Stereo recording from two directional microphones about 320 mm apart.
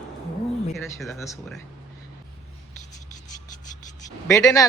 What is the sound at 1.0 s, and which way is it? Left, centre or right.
Speech, centre.